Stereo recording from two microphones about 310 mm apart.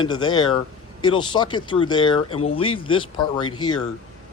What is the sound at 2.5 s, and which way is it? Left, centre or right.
Speech, centre.